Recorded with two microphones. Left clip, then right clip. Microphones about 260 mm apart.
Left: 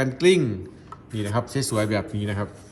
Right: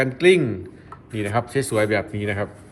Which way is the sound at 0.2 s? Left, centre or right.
Centre.